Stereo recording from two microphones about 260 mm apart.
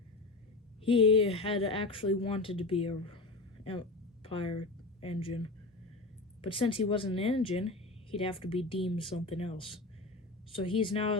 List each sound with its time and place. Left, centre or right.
0.9 s speech: left
3.6 s a sound: centre
6.4 s speech: centre